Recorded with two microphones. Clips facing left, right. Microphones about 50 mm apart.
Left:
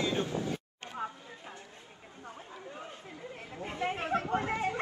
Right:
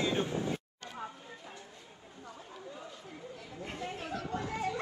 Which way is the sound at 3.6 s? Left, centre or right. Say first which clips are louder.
Left 6 dB; left.